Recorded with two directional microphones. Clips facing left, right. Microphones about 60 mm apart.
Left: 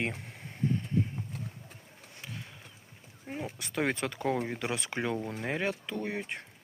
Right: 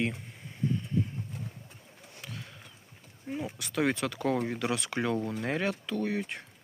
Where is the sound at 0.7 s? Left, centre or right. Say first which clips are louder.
Even; left.